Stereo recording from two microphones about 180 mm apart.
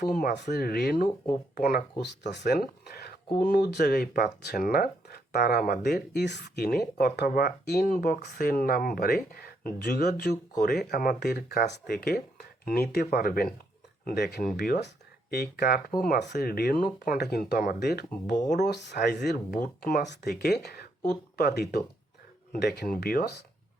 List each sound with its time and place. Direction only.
0.0 s speech: 50° left (ahead or behind)
16.0 s speech: 45° left (ahead or behind)
16.3 s speech: 60° left (ahead or behind)
20.1 s speech: 60° left (ahead or behind)